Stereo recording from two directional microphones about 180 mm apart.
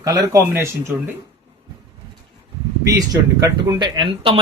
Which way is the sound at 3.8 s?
30° right (ahead or behind).